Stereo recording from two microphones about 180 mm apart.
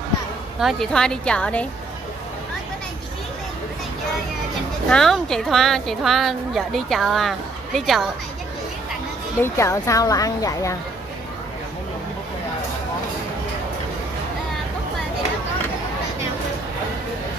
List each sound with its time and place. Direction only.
0.6 s a woman's voice: centre (ahead or behind)
4.8 s a woman's voice: centre (ahead or behind)
9.4 s speech: 15° left (ahead or behind)